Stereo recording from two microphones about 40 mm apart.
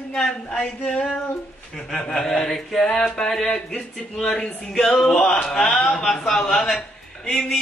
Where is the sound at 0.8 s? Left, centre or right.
Left.